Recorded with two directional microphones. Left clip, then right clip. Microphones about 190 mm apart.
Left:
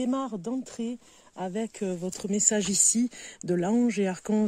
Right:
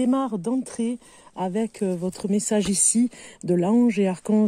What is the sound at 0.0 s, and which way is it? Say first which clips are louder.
Speech: right 6 dB; 35° right (ahead or behind).